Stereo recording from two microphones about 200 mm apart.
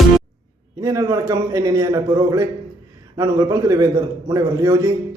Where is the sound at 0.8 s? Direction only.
20° right (ahead or behind).